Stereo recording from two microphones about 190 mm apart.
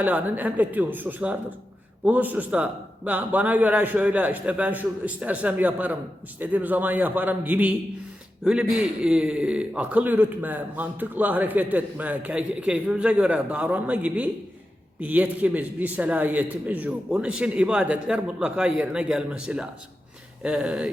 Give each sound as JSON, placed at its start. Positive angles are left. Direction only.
{"t": 0.0, "sound": "a man's voice", "side_deg": -10}